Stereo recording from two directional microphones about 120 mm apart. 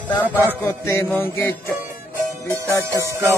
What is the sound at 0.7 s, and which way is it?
Music, 20° left (ahead or behind).